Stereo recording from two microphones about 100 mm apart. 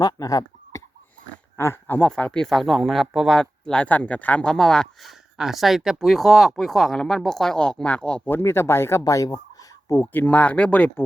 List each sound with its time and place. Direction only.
0.0 s speech: 40° left (ahead or behind)
1.5 s speech: 25° left (ahead or behind)
2.0 s speech: 10° left (ahead or behind); by 9.4 s 35° left (ahead or behind)
10.0 s speech: 20° left (ahead or behind)